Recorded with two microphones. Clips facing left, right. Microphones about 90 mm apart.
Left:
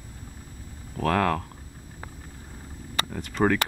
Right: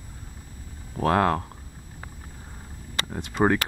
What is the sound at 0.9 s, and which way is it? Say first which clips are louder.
Speech: right 2 dB; 25° right (ahead or behind).